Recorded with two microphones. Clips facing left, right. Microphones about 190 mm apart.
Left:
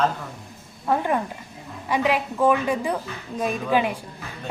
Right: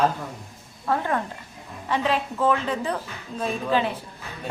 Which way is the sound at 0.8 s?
15° left (ahead or behind).